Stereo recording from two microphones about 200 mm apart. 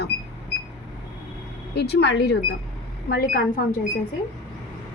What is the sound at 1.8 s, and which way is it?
A woman's voice, 55° left (ahead or behind).